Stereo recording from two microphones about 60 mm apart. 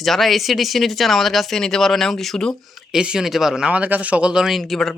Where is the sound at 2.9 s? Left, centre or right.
Centre.